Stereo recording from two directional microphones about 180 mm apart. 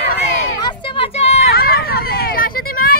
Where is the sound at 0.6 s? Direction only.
30° left (ahead or behind).